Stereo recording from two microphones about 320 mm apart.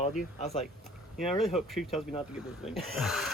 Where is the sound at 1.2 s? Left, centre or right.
Centre.